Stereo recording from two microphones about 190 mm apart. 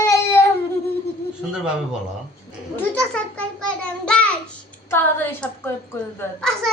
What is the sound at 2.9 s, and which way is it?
A child's voice, 5° left (ahead or behind).